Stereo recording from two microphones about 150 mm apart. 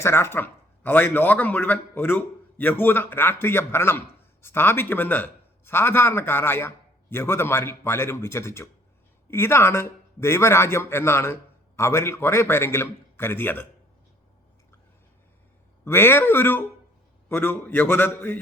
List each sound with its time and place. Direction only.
0.0 s a man's voice: 15° left (ahead or behind)
15.8 s a man's voice: 15° left (ahead or behind)